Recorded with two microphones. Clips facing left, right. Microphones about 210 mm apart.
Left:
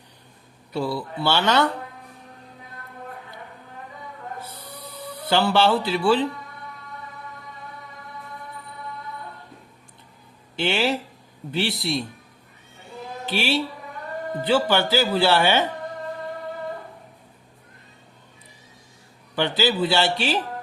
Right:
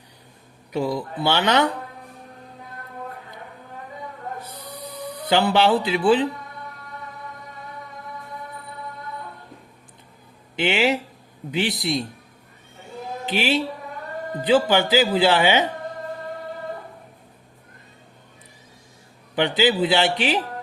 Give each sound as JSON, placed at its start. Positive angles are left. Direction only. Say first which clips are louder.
{"t": 0.7, "sound": "a man's voice", "louder": "right 2 dB", "side_deg": -15}
{"t": 4.4, "sound": "music", "louder": "right 2 dB", "side_deg": -15}
{"t": 10.6, "sound": "a man's voice", "louder": "right 2 dB", "side_deg": -15}
{"t": 13.2, "sound": "a man's voice", "louder": "right 2 dB", "side_deg": -15}
{"t": 19.4, "sound": "a man's voice", "louder": "right 2 dB", "side_deg": -20}